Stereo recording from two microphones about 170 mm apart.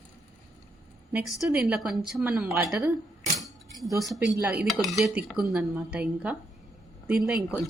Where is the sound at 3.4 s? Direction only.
Centre (ahead or behind).